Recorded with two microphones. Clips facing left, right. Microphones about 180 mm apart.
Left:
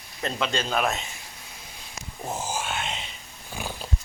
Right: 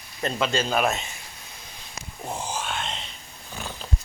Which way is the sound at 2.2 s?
5° left (ahead or behind).